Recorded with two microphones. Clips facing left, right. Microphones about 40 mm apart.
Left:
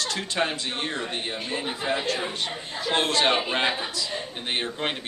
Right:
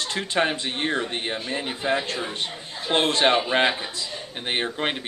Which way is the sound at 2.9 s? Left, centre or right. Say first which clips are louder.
Right 3 dB; right.